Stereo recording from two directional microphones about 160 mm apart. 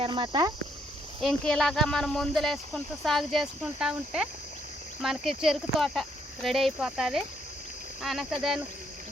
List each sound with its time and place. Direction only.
0.0 s speech: 30° right (ahead or behind)
1.2 s speech: centre (ahead or behind)